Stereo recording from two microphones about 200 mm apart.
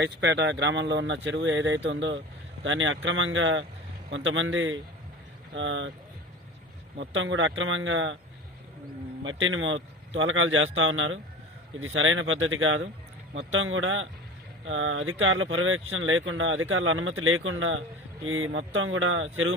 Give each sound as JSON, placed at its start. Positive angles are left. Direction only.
{"t": 0.0, "sound": "speech", "side_deg": -60}
{"t": 5.5, "sound": "speech", "side_deg": -70}
{"t": 7.0, "sound": "speech", "side_deg": -70}
{"t": 9.2, "sound": "speech", "side_deg": -80}